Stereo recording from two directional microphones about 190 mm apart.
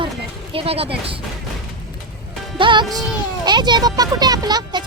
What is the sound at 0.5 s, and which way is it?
Speech, 30° right (ahead or behind).